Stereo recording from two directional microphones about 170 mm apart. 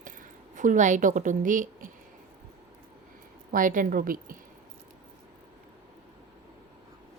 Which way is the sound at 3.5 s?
50° right (ahead or behind).